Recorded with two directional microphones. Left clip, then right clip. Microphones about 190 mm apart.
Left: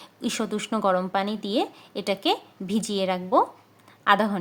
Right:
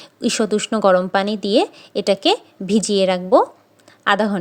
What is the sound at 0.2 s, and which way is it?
A woman's voice, 25° right (ahead or behind).